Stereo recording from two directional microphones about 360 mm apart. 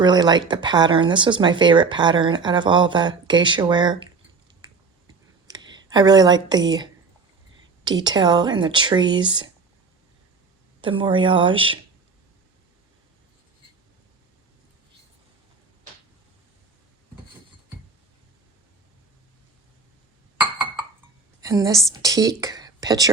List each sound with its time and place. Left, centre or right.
0.0 s speech: centre
5.5 s speech: centre
8.0 s speech: centre
10.8 s speech: centre
20.4 s chink: centre
21.4 s speech: centre